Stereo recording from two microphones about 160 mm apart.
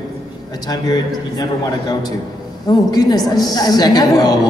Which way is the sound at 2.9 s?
25° left (ahead or behind).